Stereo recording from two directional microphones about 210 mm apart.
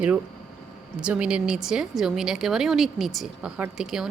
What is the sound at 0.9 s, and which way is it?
Speech, 5° right (ahead or behind).